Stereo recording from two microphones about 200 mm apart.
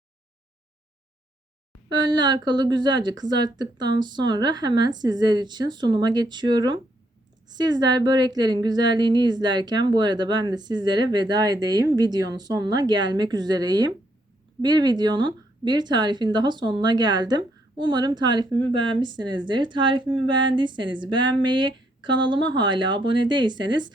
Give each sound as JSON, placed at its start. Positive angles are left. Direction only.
{"t": 1.9, "sound": "speech", "side_deg": -20}